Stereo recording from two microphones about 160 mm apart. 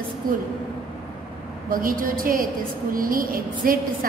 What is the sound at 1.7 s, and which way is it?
A woman's voice, 60° right (ahead or behind).